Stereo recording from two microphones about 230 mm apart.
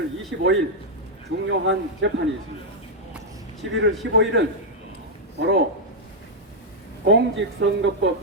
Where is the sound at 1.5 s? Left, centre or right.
Right.